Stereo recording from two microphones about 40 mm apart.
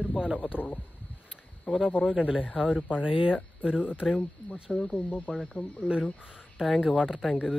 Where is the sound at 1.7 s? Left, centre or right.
Right.